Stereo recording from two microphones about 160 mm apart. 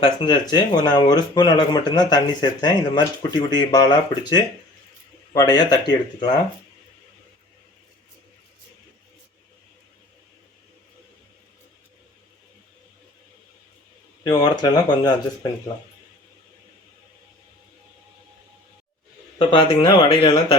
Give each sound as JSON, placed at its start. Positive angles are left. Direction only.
{"t": 0.0, "sound": "speech", "side_deg": 25}
{"t": 14.3, "sound": "speech", "side_deg": 25}
{"t": 19.4, "sound": "speech", "side_deg": 30}